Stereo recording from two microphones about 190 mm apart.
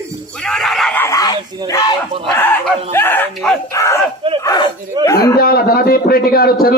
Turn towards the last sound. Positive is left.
turn(degrees=50)  # may be behind; listen again after turning